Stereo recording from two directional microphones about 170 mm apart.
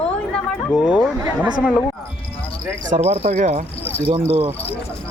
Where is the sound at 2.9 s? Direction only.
40° right (ahead or behind).